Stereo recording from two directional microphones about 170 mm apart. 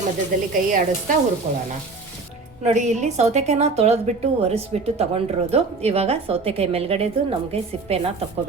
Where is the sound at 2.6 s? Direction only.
45° right (ahead or behind).